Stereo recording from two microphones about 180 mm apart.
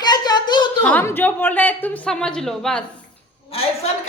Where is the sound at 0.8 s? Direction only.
10° left (ahead or behind).